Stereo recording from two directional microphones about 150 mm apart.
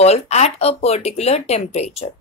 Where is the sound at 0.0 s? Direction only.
45° left (ahead or behind).